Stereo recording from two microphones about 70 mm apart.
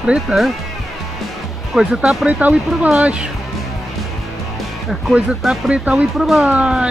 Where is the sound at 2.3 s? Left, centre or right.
Right.